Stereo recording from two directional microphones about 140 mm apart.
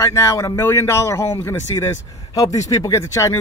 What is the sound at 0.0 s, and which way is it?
A man's voice, 20° left (ahead or behind).